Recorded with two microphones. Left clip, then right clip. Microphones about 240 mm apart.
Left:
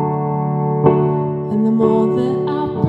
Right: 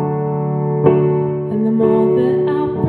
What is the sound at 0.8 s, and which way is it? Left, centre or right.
Music, left.